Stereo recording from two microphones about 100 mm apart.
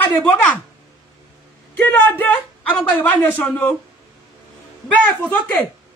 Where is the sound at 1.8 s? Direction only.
20° left (ahead or behind).